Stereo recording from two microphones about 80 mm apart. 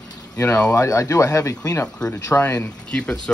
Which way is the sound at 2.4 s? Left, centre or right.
Left.